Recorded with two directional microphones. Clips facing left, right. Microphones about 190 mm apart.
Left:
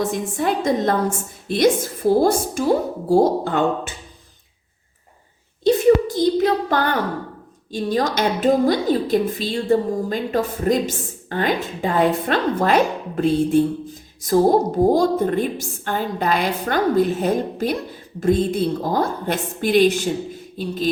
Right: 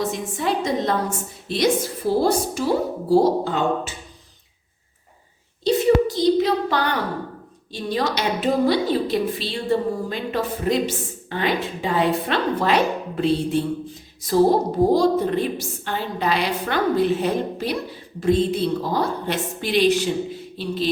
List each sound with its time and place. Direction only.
0.0 s a woman's voice: 50° left (ahead or behind)
5.6 s a sound: 50° left (ahead or behind)
7.7 s a woman's voice: 45° left (ahead or behind)